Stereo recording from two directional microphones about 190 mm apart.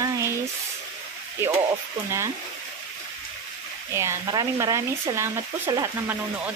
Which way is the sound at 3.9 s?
15° right (ahead or behind).